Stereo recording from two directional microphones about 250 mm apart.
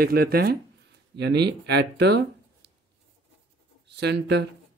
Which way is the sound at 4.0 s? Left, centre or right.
Right.